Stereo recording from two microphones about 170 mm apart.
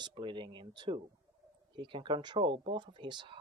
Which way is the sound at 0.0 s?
30° right (ahead or behind).